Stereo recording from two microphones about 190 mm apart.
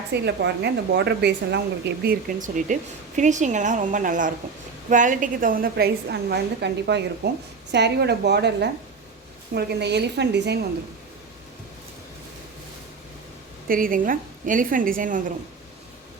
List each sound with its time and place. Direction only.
0.1 s a woman's voice: 60° right (ahead or behind)
2.0 s a woman's voice: 45° right (ahead or behind); by 10.7 s 60° right (ahead or behind)
13.7 s a woman's voice: 45° right (ahead or behind)